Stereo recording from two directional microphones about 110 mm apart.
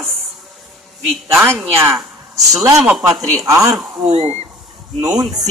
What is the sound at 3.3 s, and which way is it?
Speech, 30° right (ahead or behind).